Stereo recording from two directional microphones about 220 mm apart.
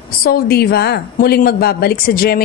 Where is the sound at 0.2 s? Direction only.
45° left (ahead or behind).